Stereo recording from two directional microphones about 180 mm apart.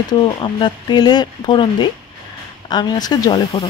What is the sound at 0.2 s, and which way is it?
Speech, 25° left (ahead or behind).